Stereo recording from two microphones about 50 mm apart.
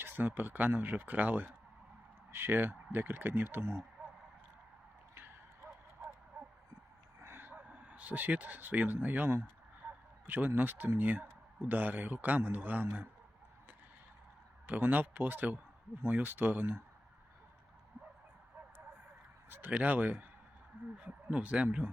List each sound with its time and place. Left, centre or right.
0.0 s speech: right
2.3 s speech: right
7.2 s a sound: right
7.7 s a man's voice: right
14.7 s speech: right
19.5 s a sound: right
19.7 s speech: right